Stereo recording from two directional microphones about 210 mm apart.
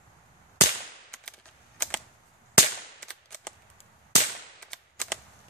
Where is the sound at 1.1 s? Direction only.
5° left (ahead or behind).